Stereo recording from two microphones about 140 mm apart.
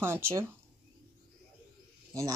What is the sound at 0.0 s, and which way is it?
Speech, 15° right (ahead or behind).